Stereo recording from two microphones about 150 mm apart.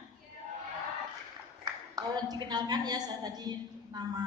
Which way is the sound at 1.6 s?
25° right (ahead or behind).